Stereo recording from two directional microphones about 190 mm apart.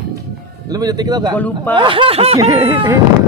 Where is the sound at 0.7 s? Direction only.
20° right (ahead or behind).